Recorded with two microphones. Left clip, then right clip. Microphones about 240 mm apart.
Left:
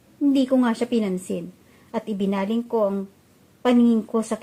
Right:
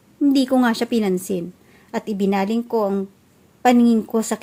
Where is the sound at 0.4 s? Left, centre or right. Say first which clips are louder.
Right 3 dB; right.